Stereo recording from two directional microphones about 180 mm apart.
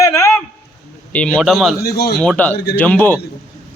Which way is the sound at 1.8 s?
60° left (ahead or behind).